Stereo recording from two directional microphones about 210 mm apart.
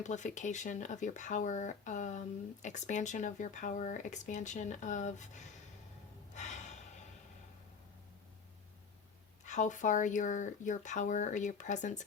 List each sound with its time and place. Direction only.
0.0 s speech: 35° left (ahead or behind)
6.3 s gasp: 35° left (ahead or behind)
9.5 s speech: 35° left (ahead or behind)